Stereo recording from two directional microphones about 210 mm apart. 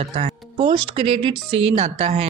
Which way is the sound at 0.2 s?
30° right (ahead or behind).